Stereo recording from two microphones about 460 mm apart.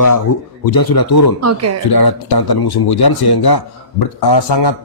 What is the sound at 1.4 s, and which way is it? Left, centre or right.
Speech, right.